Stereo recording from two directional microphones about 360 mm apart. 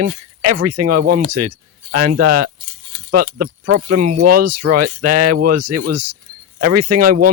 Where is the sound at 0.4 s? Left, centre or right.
Right.